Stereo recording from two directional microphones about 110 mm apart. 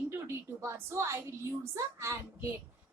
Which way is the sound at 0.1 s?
25° right (ahead or behind).